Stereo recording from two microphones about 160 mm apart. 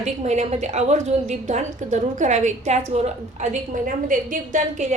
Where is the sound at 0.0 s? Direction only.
45° right (ahead or behind).